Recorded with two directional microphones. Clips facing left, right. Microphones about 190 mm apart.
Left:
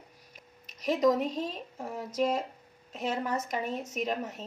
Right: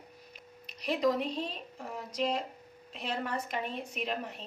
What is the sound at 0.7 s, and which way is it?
Speech, 45° left (ahead or behind).